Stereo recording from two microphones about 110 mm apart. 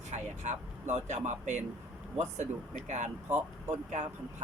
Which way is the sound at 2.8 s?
90° right.